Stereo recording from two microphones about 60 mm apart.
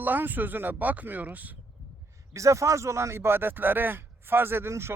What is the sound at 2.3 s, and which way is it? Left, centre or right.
Speech, right.